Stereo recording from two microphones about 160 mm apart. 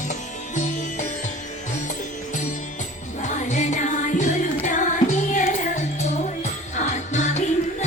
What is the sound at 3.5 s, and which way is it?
Music, 50° left (ahead or behind).